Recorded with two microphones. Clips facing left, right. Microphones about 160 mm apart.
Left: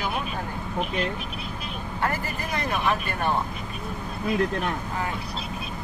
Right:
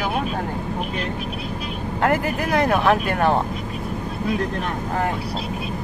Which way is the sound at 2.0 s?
80° right.